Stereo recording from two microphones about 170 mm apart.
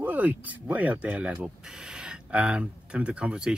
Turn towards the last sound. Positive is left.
turn(degrees=-5)  # may be behind; listen again after turning